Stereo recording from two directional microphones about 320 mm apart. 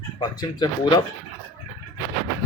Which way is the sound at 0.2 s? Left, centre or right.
Centre.